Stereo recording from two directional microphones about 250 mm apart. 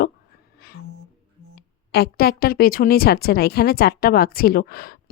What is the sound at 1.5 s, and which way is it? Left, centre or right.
A woman's voice, left.